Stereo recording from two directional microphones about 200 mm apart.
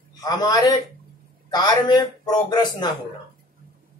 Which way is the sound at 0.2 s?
20° left (ahead or behind).